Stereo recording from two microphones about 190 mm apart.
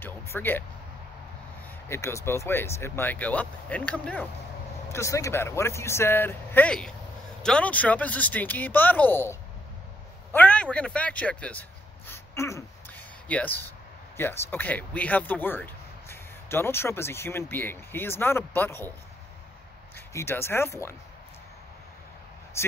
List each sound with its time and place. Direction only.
0.0 s a sound: 10° left (ahead or behind)
1.9 s speech: 15° left (ahead or behind)
12.1 s a sound: 15° left (ahead or behind)
14.1 s speech: 10° left (ahead or behind)
20.1 s speech: 15° left (ahead or behind)
22.6 s speech: 15° left (ahead or behind)